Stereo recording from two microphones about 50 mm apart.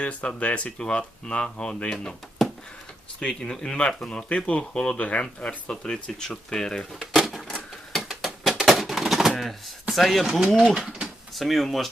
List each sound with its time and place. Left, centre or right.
0.0 s speech: left
2.4 s a sound: centre
3.2 s speech: left
7.1 s typewriter: centre
8.2 s a sound: centre
9.9 s speech: centre
10.8 s speech: centre
11.3 s speech: centre